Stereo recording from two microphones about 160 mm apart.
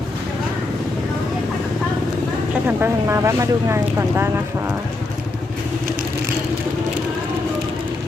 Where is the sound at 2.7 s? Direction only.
15° right (ahead or behind).